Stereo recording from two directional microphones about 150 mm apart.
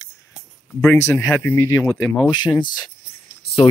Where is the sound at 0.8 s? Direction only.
20° left (ahead or behind).